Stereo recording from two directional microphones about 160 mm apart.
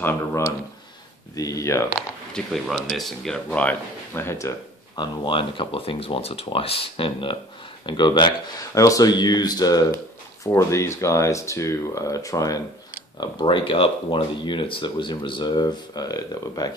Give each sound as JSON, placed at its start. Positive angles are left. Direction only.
{"t": 0.0, "sound": "speech", "side_deg": 15}
{"t": 2.0, "sound": "speech", "side_deg": 0}